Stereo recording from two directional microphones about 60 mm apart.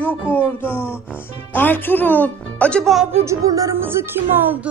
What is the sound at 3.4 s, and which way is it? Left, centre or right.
Speech, right.